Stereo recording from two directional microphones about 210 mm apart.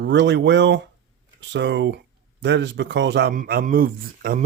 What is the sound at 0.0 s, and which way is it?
A man's voice, 55° right (ahead or behind).